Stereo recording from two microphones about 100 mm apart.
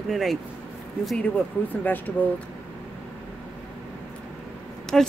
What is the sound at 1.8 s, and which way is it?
Speech, 20° left (ahead or behind).